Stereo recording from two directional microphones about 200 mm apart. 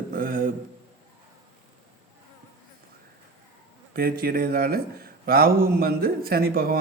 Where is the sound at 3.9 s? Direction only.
45° right (ahead or behind).